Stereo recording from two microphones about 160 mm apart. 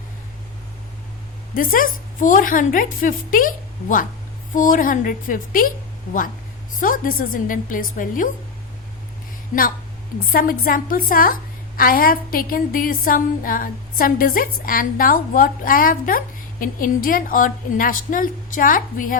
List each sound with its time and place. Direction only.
1.5 s a woman's voice: 60° left (ahead or behind)
6.7 s a woman's voice: 60° left (ahead or behind)
10.3 s a woman's voice: 60° left (ahead or behind)